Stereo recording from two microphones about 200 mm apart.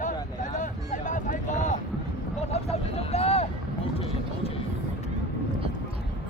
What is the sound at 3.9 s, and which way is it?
Vehicle, 30° left (ahead or behind).